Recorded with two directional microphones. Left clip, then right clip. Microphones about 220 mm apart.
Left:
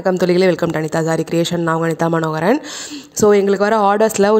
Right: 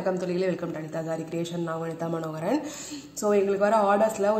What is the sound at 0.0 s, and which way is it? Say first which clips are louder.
Speech: left 13 dB; 50° left (ahead or behind).